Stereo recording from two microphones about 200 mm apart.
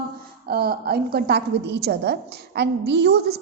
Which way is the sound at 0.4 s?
50° right (ahead or behind).